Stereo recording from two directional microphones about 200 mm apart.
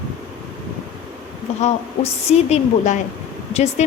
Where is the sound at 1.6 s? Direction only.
35° left (ahead or behind).